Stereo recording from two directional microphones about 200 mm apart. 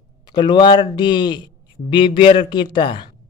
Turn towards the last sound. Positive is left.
turn(degrees=25)  # may be behind; listen again after turning